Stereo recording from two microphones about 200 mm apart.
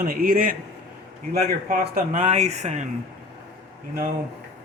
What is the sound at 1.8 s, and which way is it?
Speech, 45° right (ahead or behind).